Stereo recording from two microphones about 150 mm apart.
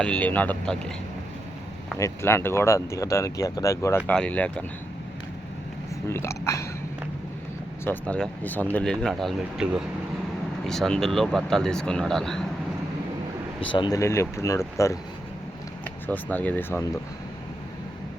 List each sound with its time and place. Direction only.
0.0 s speech: 10° left (ahead or behind)
2.0 s speech: 20° left (ahead or behind)
6.1 s speech: 20° left (ahead or behind)
7.9 s speech: 10° left (ahead or behind)
13.7 s speech: 30° left (ahead or behind)
16.0 s speech: 10° left (ahead or behind)